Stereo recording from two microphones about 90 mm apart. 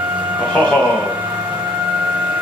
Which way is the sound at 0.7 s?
15° right (ahead or behind).